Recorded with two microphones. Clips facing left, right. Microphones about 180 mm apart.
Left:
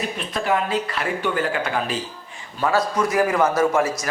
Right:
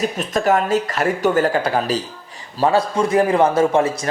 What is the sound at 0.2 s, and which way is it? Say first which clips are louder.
A man's voice: right 4 dB; 45° right (ahead or behind).